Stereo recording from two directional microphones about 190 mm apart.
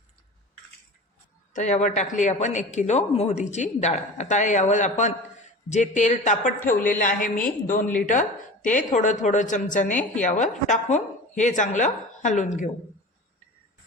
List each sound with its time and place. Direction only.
1.5 s a woman's voice: 40° left (ahead or behind)